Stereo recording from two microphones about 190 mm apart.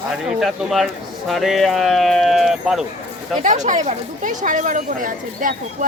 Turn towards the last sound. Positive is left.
turn(degrees=-45)  # may be behind; listen again after turning